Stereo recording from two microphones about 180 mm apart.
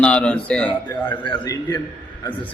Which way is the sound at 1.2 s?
25° left (ahead or behind).